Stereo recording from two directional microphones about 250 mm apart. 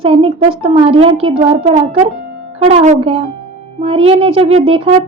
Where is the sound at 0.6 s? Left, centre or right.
Right.